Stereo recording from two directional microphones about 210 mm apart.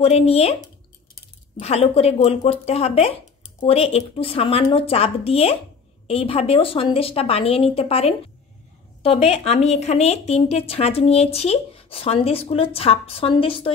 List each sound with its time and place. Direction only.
0.0 s speech: 30° left (ahead or behind)
1.6 s speech: 30° left (ahead or behind)